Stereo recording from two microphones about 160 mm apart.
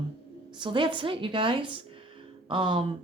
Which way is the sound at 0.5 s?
30° right (ahead or behind).